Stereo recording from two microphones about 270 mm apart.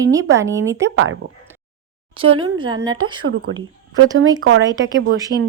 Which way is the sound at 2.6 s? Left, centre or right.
Centre.